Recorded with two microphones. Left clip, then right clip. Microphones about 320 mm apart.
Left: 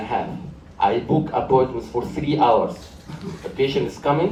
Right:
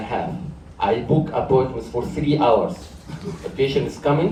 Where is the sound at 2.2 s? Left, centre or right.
Left.